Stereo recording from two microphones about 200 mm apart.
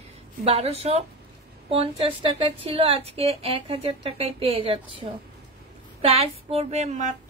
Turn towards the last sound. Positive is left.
turn(degrees=-35)  # may be behind; listen again after turning